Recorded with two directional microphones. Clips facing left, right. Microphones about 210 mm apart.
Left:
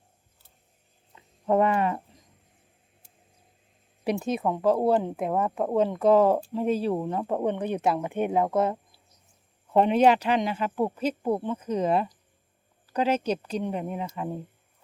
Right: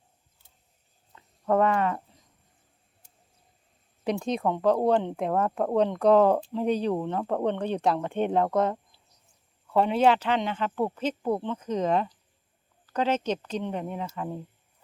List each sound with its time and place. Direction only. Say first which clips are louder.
1.1 s a sound: left 1 dB; 15° left (ahead or behind)
4.0 s speech: even; 10° left (ahead or behind)
9.7 s speech: left 2 dB; 20° left (ahead or behind)